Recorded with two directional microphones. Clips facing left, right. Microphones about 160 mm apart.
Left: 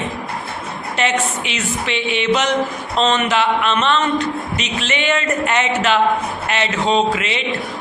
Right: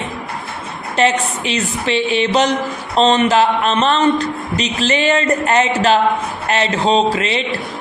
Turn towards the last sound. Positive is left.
turn(degrees=-35)  # may be behind; listen again after turning